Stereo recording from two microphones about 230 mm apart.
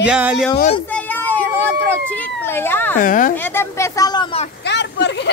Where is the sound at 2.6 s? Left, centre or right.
Centre.